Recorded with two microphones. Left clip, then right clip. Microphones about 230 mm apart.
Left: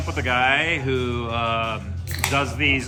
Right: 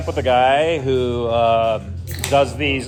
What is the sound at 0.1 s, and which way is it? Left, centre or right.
Speech, centre.